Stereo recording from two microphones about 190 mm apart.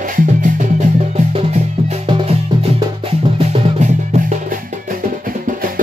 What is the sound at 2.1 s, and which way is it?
Music, 25° right (ahead or behind).